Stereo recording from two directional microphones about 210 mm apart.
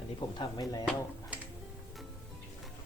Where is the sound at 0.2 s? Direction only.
20° left (ahead or behind).